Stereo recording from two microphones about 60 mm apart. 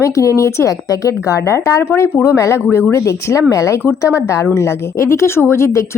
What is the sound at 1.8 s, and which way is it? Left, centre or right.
A woman's voice, left.